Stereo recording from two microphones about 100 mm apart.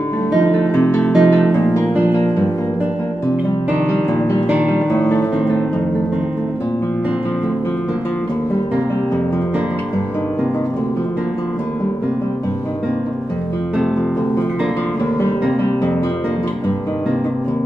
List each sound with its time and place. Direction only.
0.7 s music: 20° left (ahead or behind)
1.1 s music: 5° right (ahead or behind)
4.5 s music: 10° right (ahead or behind)
4.9 s music: 20° left (ahead or behind)